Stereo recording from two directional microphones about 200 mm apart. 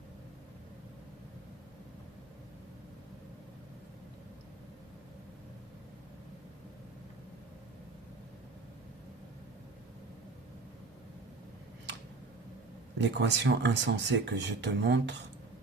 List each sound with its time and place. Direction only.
13.0 s speech: 65° right (ahead or behind)